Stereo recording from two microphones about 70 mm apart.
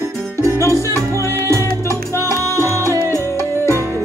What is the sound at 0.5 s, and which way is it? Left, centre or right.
Music, left.